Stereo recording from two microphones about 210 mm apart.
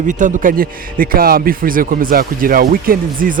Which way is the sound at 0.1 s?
35° right (ahead or behind).